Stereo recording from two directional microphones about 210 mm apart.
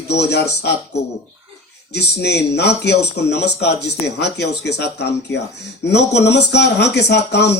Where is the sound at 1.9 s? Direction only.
50° left (ahead or behind).